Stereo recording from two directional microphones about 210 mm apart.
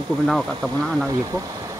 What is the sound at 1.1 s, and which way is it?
Speech, 15° right (ahead or behind).